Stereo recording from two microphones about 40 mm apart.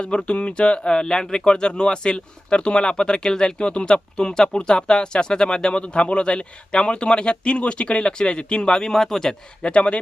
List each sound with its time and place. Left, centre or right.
0.0 s speech: left